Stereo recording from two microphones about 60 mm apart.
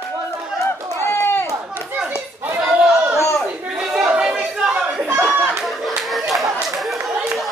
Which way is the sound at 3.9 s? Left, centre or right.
Centre.